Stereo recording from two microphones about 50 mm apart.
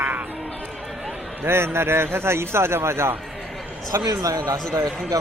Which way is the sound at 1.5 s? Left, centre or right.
Right.